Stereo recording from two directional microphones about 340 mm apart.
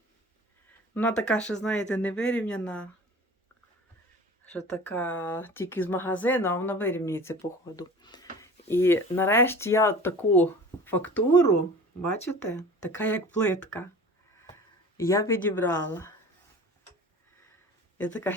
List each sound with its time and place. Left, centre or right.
0.9 s speech: centre
4.6 s speech: centre
7.8 s a sound: centre
9.1 s speech: centre
11.3 s speech: left
12.3 s speech: centre
14.9 s speech: centre
17.9 s speech: centre